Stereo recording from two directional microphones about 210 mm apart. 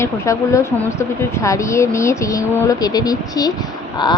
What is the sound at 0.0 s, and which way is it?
Speech, 15° left (ahead or behind).